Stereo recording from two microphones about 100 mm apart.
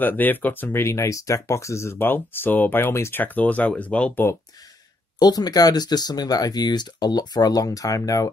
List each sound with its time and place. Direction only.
0.0 s speech: 20° left (ahead or behind)
5.2 s speech: 40° left (ahead or behind)